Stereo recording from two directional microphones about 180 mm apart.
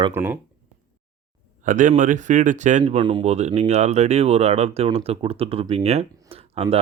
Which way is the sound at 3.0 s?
25° right (ahead or behind).